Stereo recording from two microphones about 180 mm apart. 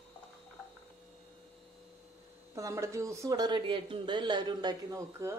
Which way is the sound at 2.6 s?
15° right (ahead or behind).